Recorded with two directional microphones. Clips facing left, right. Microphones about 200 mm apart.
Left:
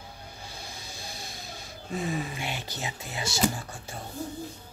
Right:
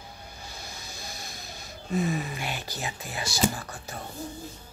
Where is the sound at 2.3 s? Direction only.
25° left (ahead or behind).